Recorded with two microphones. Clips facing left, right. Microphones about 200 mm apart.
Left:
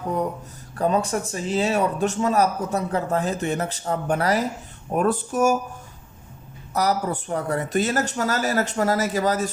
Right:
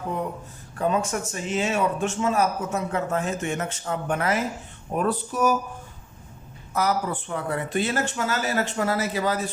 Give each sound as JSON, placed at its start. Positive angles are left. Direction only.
{"t": 0.8, "sound": "speech", "side_deg": 35}
{"t": 4.9, "sound": "speech", "side_deg": 50}
{"t": 6.7, "sound": "speech", "side_deg": 40}